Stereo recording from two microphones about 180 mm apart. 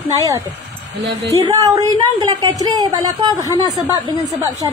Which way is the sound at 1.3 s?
20° right (ahead or behind).